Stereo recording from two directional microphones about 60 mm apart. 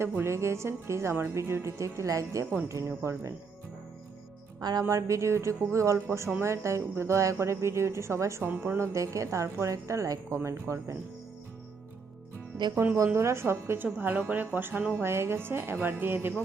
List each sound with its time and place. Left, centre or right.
0.0 s a woman's voice: right
4.8 s a woman's voice: right
8.4 s speech: right
8.9 s speech: right
12.8 s speech: right
13.1 s a woman's voice: right
14.0 s speech: right